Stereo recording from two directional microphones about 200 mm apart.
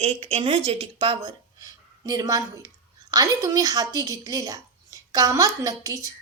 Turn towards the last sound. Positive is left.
turn(degrees=-15)  # may be behind; listen again after turning